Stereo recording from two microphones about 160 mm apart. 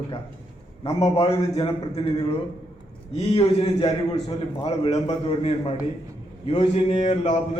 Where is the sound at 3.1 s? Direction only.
40° left (ahead or behind).